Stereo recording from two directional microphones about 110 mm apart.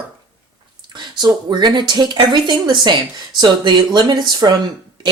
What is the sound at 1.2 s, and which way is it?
Speech, 40° right (ahead or behind).